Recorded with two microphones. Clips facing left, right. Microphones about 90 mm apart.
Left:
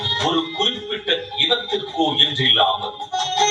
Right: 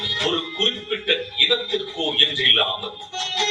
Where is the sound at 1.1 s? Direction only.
25° left (ahead or behind).